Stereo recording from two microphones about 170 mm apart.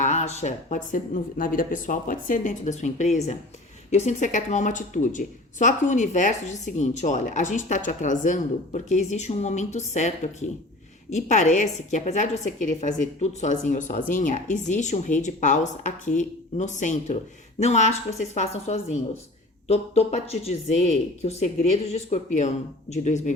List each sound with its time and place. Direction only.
0.0 s speech: 40° left (ahead or behind)
11.1 s a woman's voice: 45° left (ahead or behind)